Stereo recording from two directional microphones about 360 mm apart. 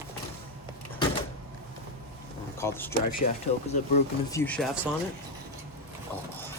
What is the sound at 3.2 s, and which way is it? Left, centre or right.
Speech, centre.